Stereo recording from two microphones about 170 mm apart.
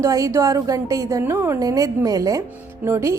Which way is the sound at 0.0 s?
20° right (ahead or behind).